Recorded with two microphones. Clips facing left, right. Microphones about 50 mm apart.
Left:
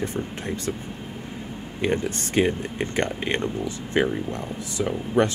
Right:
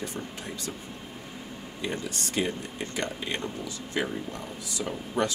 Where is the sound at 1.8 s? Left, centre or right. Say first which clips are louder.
Left 8 dB; left.